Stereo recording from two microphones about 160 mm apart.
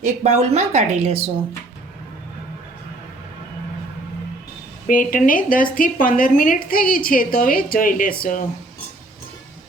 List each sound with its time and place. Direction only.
0.0 s a woman's voice: 45° right (ahead or behind)
4.9 s a woman's voice: 60° left (ahead or behind)